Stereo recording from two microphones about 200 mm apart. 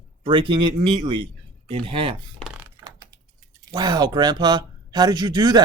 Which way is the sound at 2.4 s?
10° right (ahead or behind).